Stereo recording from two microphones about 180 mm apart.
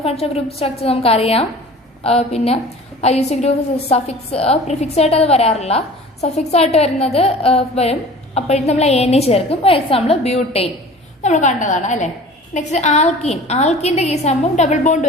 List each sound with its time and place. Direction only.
0.0 s a woman's voice: 35° left (ahead or behind)